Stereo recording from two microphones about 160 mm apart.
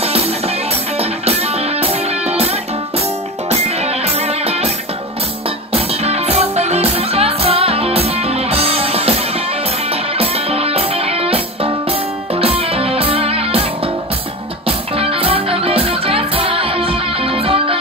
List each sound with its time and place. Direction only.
0.0 s music: 40° right (ahead or behind)
5.7 s music: 40° right (ahead or behind)
10.1 s music: 40° right (ahead or behind)
15.0 s music: 35° right (ahead or behind)